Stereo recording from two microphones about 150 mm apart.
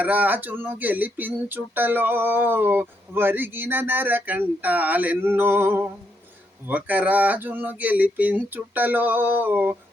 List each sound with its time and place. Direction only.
0.0 s speech: 10° right (ahead or behind)